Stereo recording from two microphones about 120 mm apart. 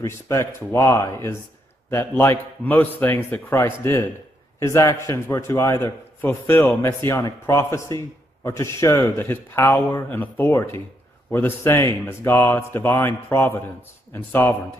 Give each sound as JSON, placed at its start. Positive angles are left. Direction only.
{"t": 0.0, "sound": "speech", "side_deg": 20}
{"t": 7.2, "sound": "speech", "side_deg": 25}